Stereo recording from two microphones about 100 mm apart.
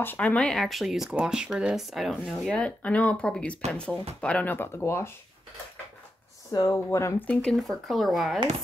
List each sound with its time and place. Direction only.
0.0 s speech: 15° left (ahead or behind); by 2.6 s centre (ahead or behind)
2.6 s speech: 15° left (ahead or behind)
6.5 s speech: 30° left (ahead or behind)
7.2 s speech: 5° left (ahead or behind)